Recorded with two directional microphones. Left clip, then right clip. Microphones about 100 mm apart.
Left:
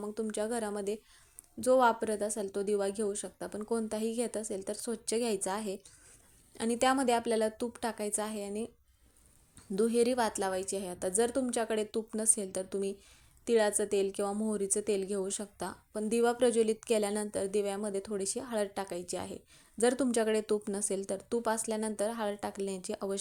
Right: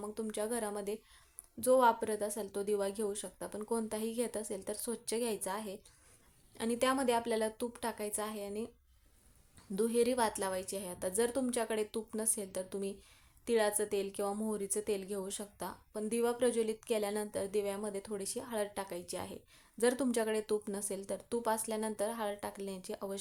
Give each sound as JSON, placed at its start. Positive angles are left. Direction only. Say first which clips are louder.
{"t": 0.0, "sound": "a woman's voice", "louder": "left 3 dB", "side_deg": 25}
{"t": 9.7, "sound": "a woman's voice", "louder": "left 3 dB", "side_deg": 30}